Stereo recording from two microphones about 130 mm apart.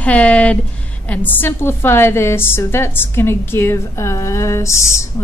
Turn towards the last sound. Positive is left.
turn(degrees=20)  # may be behind; listen again after turning